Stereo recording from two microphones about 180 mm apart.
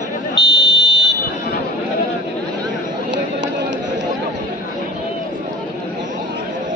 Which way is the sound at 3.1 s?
85° right.